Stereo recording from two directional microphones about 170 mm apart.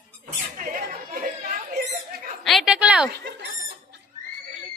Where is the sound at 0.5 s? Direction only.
55° right (ahead or behind).